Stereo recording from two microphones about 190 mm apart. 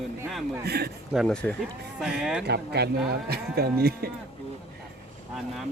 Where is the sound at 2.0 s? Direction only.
5° right (ahead or behind).